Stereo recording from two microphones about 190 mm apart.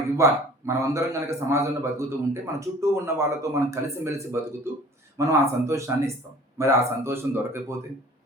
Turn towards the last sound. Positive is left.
turn(degrees=-15)  # may be behind; listen again after turning